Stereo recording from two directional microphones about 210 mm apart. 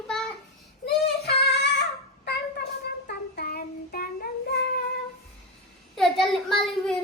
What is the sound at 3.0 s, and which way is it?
Child singing, 45° left (ahead or behind).